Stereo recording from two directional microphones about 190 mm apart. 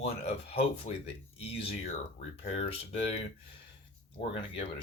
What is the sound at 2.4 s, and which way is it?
Speech, 30° left (ahead or behind).